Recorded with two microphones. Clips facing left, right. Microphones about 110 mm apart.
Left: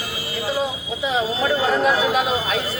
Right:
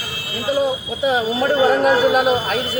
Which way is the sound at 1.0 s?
55° right (ahead or behind).